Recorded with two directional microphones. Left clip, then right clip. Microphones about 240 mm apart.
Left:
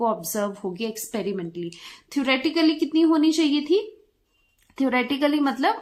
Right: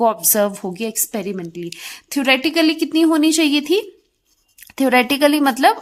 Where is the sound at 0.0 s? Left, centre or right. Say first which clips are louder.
Right 8 dB; right.